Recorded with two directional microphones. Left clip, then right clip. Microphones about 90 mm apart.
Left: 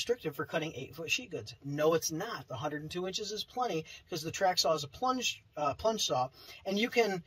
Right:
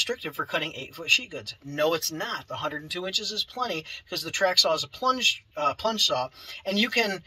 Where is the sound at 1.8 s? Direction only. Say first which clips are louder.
Right 4 dB; 40° left (ahead or behind).